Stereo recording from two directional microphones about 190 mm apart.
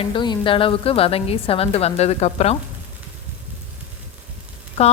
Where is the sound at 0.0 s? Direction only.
25° left (ahead or behind).